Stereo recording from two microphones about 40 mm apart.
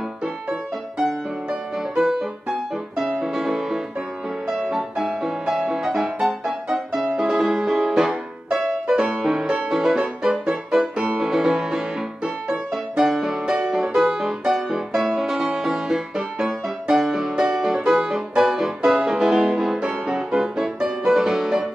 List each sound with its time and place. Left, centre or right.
1.0 s music: centre
9.9 s music: centre
12.9 s music: centre